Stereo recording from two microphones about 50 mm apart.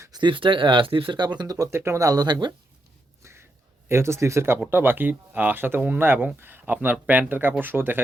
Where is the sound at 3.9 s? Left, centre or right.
Right.